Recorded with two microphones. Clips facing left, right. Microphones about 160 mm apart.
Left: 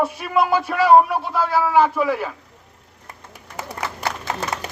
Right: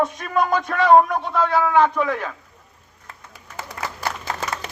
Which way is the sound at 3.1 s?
15° left (ahead or behind).